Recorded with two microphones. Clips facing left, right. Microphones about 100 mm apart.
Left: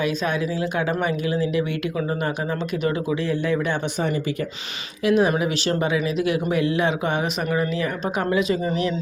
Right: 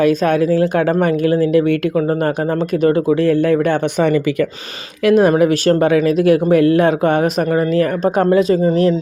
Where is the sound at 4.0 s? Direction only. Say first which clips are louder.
Right 11 dB; 80° right.